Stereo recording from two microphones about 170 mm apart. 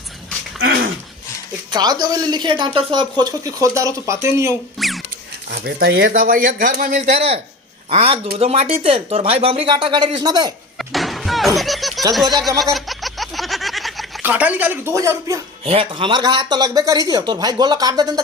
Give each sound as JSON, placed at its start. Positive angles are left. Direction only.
{"t": 1.7, "sound": "a woman's voice", "side_deg": -25}
{"t": 4.8, "sound": "zipper", "side_deg": 0}
{"t": 5.5, "sound": "speech", "side_deg": -65}
{"t": 10.8, "sound": "music", "side_deg": 0}
{"t": 12.7, "sound": "a sound", "side_deg": 0}
{"t": 14.3, "sound": "speech", "side_deg": -10}
{"t": 15.6, "sound": "a woman's voice", "side_deg": -35}